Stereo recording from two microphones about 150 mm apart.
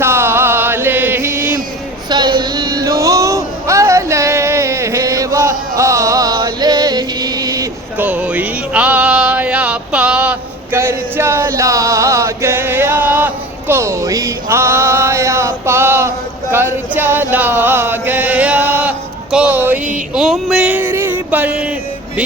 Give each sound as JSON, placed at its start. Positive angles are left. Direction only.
{"t": 0.0, "sound": "chant", "side_deg": -15}
{"t": 2.0, "sound": "a sound", "side_deg": -30}
{"t": 8.0, "sound": "music", "side_deg": -10}